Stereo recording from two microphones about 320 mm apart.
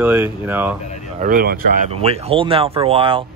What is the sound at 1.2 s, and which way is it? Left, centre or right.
Speech, right.